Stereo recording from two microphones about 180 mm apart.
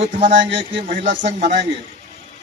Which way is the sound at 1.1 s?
85° right.